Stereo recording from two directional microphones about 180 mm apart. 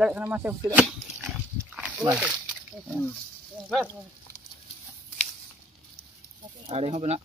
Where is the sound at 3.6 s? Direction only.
Centre (ahead or behind).